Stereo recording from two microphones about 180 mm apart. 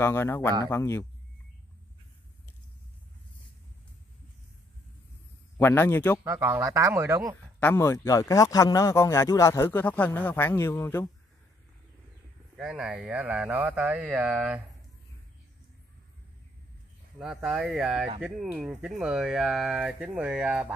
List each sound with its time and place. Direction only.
0.0 s speech: 15° left (ahead or behind)
5.6 s speech: 10° left (ahead or behind)
6.2 s speech: 15° right (ahead or behind)
7.6 s speech: 15° left (ahead or behind)
12.5 s speech: 5° right (ahead or behind)
17.2 s speech: centre (ahead or behind)